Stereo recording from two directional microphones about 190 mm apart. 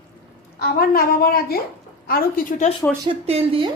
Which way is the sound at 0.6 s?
50° left (ahead or behind).